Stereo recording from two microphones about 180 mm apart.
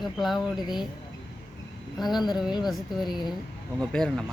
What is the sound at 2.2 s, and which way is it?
Speech, 25° left (ahead or behind).